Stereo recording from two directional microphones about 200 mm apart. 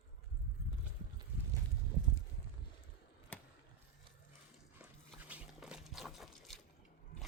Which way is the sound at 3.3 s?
5° left (ahead or behind).